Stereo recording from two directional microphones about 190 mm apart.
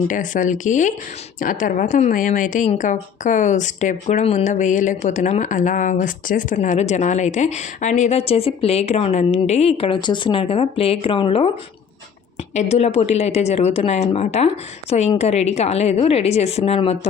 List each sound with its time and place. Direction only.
0.1 s a woman's voice: 45° left (ahead or behind)
12.5 s a woman's voice: 35° left (ahead or behind)